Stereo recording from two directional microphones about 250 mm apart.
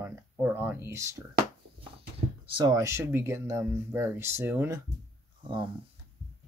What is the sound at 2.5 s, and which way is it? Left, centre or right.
Speech, centre.